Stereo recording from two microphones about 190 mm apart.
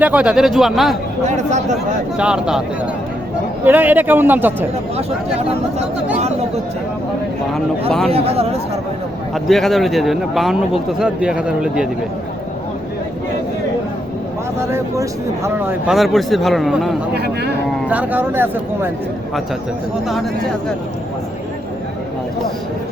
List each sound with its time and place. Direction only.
0.0 s speech: 5° right (ahead or behind)
1.2 s speech: 40° right (ahead or behind)
2.1 s speech: 5° right (ahead or behind)
8.1 s speech: 30° right (ahead or behind)
9.3 s speech: centre (ahead or behind)
15.4 s speech: 10° right (ahead or behind)
17.2 s speech: 60° right (ahead or behind)
17.8 s speech: 10° right (ahead or behind)